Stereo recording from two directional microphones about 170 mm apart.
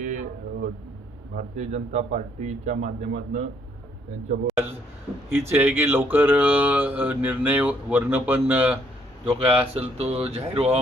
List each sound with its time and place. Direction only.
0.0 s a sound: 45° right (ahead or behind)
1.4 s a man's voice: 40° right (ahead or behind)
5.3 s speech: 15° right (ahead or behind)
9.2 s a man's voice: 30° right (ahead or behind)